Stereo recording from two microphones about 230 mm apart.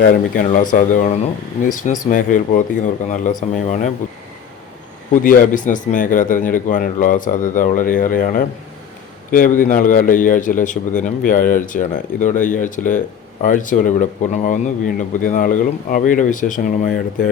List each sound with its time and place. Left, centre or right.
0.0 s speech: left
5.1 s speech: left